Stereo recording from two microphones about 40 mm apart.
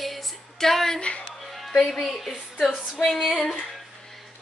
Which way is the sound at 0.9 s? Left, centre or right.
Left.